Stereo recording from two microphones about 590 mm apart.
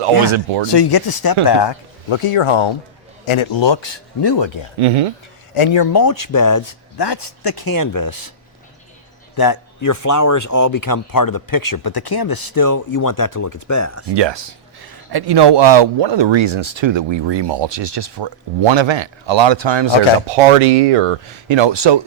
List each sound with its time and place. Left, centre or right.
0.3 s speech: right
0.8 s speech: left
4.8 s speech: right
5.5 s speech: left
9.3 s speech: left
14.1 s speech: right
20.2 s speech: right